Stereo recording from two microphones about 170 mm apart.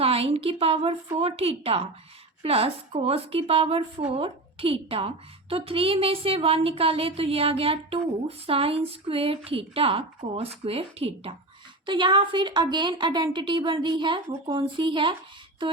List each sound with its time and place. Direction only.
0.0 s a woman's voice: 35° right (ahead or behind)